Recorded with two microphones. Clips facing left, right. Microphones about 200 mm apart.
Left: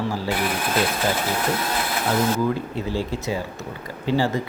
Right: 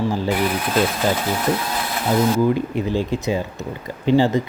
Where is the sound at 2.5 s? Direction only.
15° right (ahead or behind).